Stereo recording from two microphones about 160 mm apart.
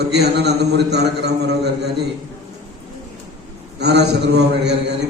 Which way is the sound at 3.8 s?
90° right.